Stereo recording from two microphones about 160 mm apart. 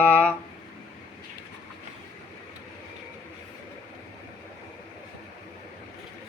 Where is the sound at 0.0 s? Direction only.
10° left (ahead or behind).